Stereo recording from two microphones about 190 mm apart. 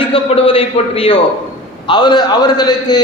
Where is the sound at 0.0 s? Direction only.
30° left (ahead or behind).